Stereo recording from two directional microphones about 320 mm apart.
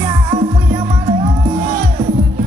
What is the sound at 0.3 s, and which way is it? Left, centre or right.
Music, centre.